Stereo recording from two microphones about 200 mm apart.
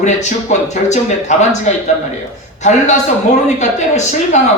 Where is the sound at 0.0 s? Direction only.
35° left (ahead or behind).